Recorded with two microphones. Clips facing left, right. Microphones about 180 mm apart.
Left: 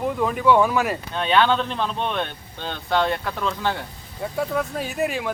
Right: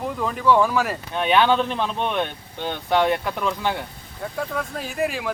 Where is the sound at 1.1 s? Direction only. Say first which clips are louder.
Right 2 dB; 15° right (ahead or behind).